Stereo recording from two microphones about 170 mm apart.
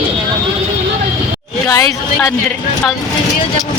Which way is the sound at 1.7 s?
15° left (ahead or behind).